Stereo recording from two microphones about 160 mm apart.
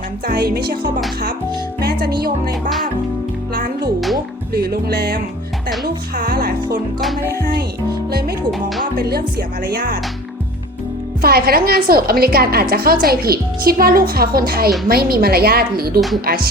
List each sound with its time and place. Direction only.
0.3 s a woman's voice: 75° right (ahead or behind)
3.5 s music: 70° right (ahead or behind)
4.5 s a woman's voice: 75° right (ahead or behind)
5.8 s music: 70° right (ahead or behind)
8.4 s music: centre (ahead or behind)
9.0 s a woman's voice: 75° right (ahead or behind)
11.2 s a woman's voice: 75° right (ahead or behind)
16.0 s speech: centre (ahead or behind)
16.2 s a woman's voice: 65° right (ahead or behind)